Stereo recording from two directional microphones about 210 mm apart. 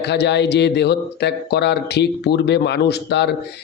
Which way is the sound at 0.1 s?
55° left (ahead or behind).